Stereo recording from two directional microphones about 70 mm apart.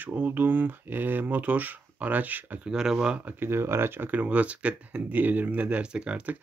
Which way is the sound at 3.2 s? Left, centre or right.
Right.